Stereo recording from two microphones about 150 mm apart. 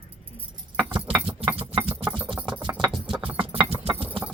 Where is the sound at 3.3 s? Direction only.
40° right (ahead or behind).